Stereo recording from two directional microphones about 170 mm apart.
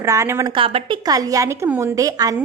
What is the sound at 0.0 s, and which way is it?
Speech, 20° right (ahead or behind).